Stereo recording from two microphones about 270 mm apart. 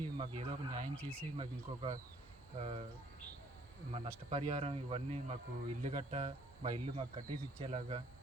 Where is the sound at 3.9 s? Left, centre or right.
Right.